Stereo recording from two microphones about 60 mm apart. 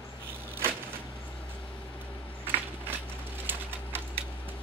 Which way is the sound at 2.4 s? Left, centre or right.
Right.